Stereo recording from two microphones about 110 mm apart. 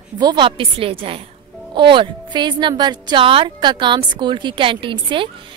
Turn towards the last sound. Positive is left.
turn(degrees=-50)  # may be behind; listen again after turning